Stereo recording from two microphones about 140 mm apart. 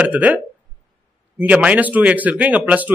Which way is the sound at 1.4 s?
10° right (ahead or behind).